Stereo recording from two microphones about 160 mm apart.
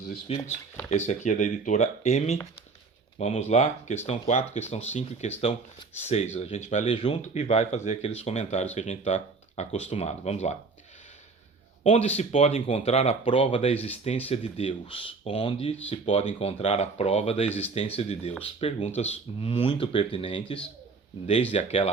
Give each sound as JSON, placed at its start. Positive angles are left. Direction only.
{"t": 0.3, "sound": "speech", "side_deg": 40}
{"t": 11.8, "sound": "speech", "side_deg": 40}
{"t": 21.5, "sound": "speech", "side_deg": 40}